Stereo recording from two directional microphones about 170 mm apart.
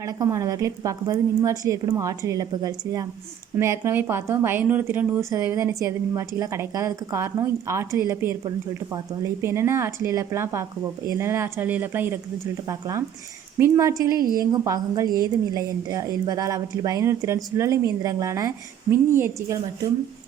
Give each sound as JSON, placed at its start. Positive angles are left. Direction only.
{"t": 0.0, "sound": "a woman's voice", "side_deg": -20}